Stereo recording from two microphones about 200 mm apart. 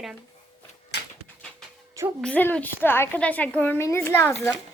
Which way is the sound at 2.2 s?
5° left (ahead or behind).